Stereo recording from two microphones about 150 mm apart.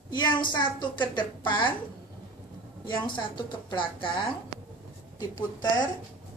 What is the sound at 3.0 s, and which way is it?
A woman's voice, 30° left (ahead or behind).